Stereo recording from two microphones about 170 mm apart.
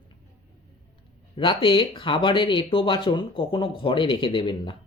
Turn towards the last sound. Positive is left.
turn(degrees=30)  # may be behind; listen again after turning